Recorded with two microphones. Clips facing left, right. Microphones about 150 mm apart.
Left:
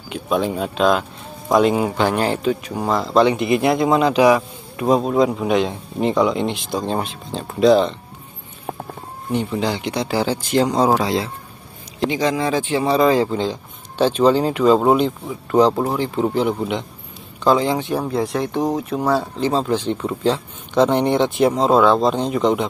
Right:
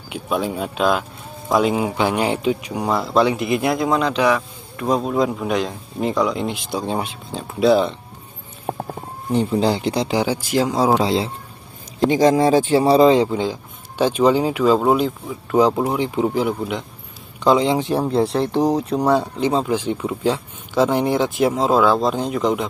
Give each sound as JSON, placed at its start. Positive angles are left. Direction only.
{"t": 0.1, "sound": "speech", "side_deg": -5}
{"t": 9.3, "sound": "speech", "side_deg": -35}
{"t": 10.0, "sound": "speech", "side_deg": -15}
{"t": 11.0, "sound": "a man's voice", "side_deg": -30}
{"t": 12.0, "sound": "speech", "side_deg": -45}
{"t": 13.1, "sound": "speech", "side_deg": -15}
{"t": 16.3, "sound": "speech", "side_deg": -5}
{"t": 17.4, "sound": "a man's voice", "side_deg": -20}
{"t": 17.7, "sound": "speech", "side_deg": -30}
{"t": 18.9, "sound": "speech", "side_deg": -15}